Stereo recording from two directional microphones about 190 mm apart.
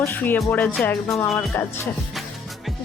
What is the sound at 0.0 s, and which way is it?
A woman's voice, 10° left (ahead or behind).